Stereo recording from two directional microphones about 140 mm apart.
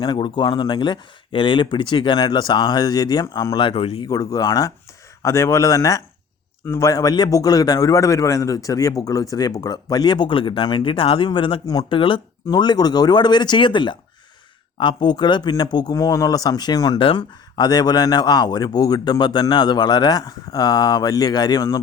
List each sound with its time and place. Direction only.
0.0 s speech: 35° left (ahead or behind)
4.0 s speech: 25° left (ahead or behind)